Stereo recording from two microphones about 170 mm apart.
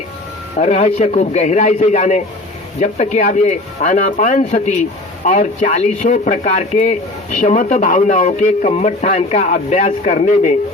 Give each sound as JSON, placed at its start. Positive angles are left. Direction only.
{"t": 0.6, "sound": "a man's voice", "side_deg": 40}